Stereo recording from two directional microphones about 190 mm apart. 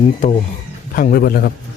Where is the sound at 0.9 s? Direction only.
50° left (ahead or behind).